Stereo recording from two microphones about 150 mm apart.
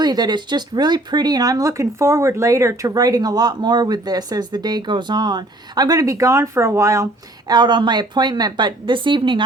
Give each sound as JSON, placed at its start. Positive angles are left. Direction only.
{"t": 0.0, "sound": "speech", "side_deg": -30}